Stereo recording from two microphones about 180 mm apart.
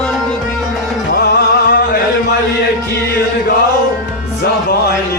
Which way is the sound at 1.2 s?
60° left (ahead or behind).